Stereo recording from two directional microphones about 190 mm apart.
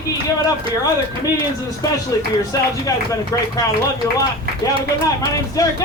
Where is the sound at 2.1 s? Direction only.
20° left (ahead or behind).